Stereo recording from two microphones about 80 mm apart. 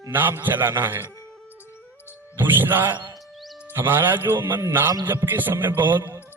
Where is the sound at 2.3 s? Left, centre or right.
Right.